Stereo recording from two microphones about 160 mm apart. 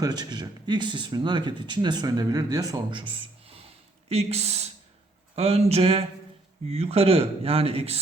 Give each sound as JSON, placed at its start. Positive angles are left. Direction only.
{"t": 0.0, "sound": "speech", "side_deg": -25}